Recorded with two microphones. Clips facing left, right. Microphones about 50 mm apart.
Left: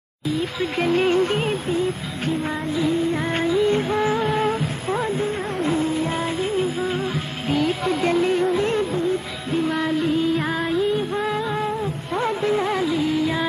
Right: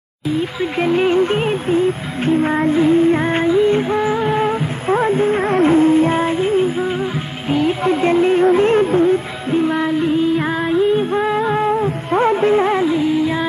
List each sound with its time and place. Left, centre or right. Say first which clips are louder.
0.6 s music: right 3 dB; centre
3.8 s music: right 4 dB; centre
4.8 s music: right 10 dB; right
5.4 s music: right 10 dB; right
9.7 s music: right 5 dB; centre
13.1 s music: right 4 dB; centre